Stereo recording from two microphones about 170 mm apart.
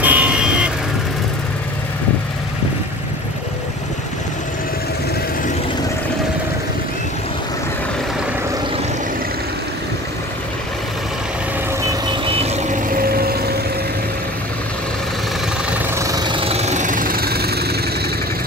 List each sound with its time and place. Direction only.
0.0 s vehicle: 10° right (ahead or behind)
11.8 s vehicle: 30° right (ahead or behind)
12.9 s vehicle: 60° right (ahead or behind)
15.9 s vehicle: 20° right (ahead or behind); by 17.7 s 70° right (ahead or behind)